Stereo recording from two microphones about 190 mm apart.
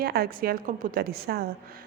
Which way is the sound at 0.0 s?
50° right (ahead or behind).